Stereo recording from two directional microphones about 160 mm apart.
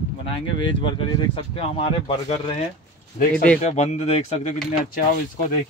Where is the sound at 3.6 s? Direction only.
45° left (ahead or behind).